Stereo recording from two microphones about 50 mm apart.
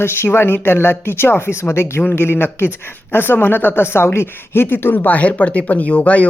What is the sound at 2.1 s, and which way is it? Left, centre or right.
Speech, left.